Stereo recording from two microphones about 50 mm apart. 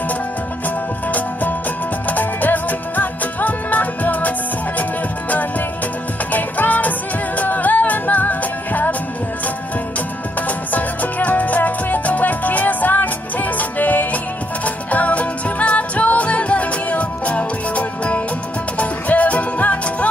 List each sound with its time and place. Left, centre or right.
2.0 s music: left
6.3 s music: left
10.7 s music: left